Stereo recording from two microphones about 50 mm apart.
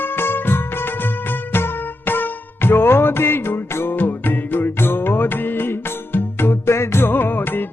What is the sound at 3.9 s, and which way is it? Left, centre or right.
Music, left.